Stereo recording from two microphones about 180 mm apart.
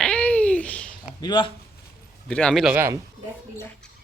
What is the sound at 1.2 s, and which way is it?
Speech, 25° left (ahead or behind).